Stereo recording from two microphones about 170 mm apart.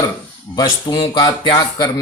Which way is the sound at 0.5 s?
25° left (ahead or behind).